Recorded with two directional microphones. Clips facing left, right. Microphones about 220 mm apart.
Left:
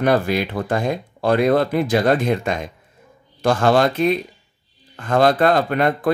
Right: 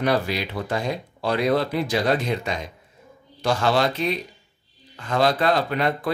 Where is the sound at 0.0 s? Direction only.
50° left (ahead or behind).